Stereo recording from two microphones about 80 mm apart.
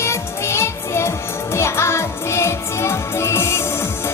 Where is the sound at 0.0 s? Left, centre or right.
Left.